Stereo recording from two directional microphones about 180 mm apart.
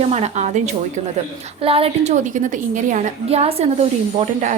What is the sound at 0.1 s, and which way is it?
A woman's voice, 35° right (ahead or behind).